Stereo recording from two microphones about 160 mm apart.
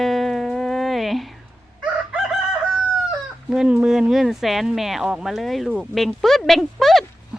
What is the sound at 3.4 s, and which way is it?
Speech, 5° right (ahead or behind).